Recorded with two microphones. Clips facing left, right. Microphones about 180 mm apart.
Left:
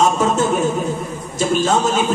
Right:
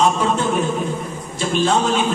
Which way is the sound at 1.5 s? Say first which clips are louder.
Even; 45° left (ahead or behind).